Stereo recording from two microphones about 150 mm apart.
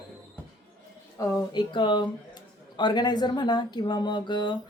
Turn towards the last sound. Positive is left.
turn(degrees=30)  # may be behind; listen again after turning